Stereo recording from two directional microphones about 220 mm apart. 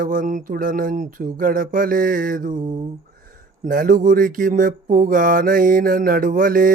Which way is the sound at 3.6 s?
40° right (ahead or behind).